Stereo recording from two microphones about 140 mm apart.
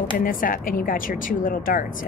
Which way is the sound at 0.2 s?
80° left.